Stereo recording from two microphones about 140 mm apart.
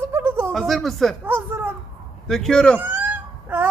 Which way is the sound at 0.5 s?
Centre (ahead or behind).